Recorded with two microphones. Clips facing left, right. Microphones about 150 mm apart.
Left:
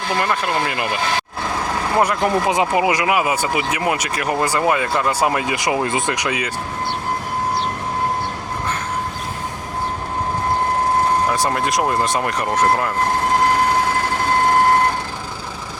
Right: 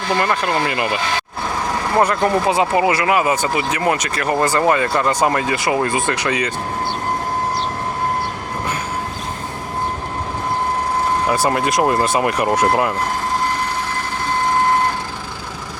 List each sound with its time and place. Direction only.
0.2 s speech: centre (ahead or behind)
2.0 s speech: 15° left (ahead or behind)
11.3 s speech: 5° right (ahead or behind)